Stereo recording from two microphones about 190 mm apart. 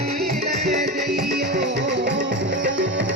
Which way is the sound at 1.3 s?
55° right (ahead or behind).